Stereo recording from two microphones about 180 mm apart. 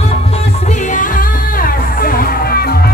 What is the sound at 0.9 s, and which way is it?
Music, 50° left (ahead or behind).